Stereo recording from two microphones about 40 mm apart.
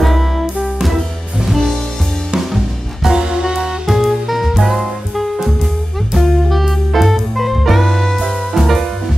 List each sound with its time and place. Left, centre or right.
0.0 s music: centre
3.1 s music: centre
3.8 s music: centre